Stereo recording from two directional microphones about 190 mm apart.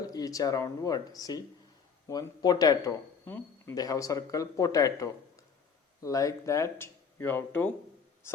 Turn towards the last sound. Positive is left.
turn(degrees=10)  # may be behind; listen again after turning